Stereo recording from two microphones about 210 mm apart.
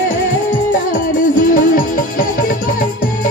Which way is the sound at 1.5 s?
40° left (ahead or behind).